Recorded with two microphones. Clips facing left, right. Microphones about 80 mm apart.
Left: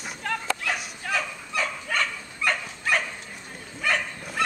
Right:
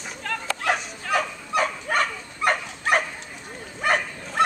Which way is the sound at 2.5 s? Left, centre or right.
Right.